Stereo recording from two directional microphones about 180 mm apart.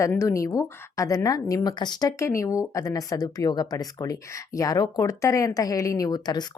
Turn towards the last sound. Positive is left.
turn(degrees=20)  # may be behind; listen again after turning